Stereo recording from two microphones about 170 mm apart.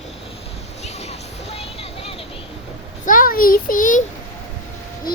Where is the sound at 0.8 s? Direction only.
40° left (ahead or behind).